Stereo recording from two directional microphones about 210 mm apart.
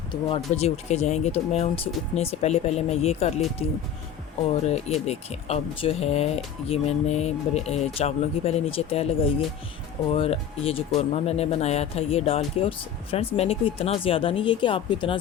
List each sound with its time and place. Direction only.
0.1 s speech: 25° left (ahead or behind)
4.6 s speech: 30° left (ahead or behind)